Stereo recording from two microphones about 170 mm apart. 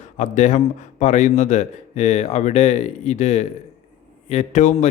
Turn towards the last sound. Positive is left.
turn(degrees=45)  # may be behind; listen again after turning